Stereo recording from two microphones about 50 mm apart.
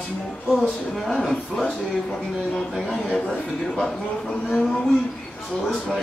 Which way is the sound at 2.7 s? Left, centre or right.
Centre.